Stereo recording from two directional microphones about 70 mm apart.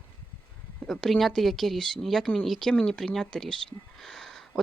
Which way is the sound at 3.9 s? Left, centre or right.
Centre.